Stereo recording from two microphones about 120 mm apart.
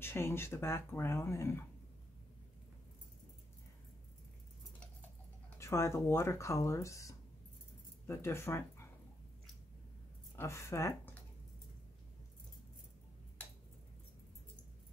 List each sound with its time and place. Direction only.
0.0 s speech: 20° left (ahead or behind)
5.6 s speech: 25° left (ahead or behind)
10.3 s speech: 25° left (ahead or behind)